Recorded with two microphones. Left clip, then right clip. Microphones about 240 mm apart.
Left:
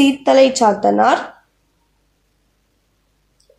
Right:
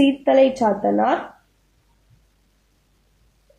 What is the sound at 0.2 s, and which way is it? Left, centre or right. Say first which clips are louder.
Speech: left 6 dB; left.